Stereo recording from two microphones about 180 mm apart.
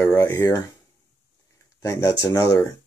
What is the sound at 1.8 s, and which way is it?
Speech, 15° left (ahead or behind).